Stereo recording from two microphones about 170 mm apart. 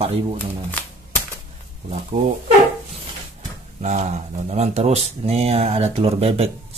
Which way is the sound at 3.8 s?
45° right (ahead or behind).